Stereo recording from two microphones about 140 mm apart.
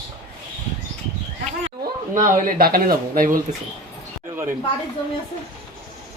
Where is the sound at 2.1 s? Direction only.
75° right (ahead or behind).